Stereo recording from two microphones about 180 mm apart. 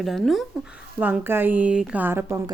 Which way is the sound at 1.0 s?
10° right (ahead or behind).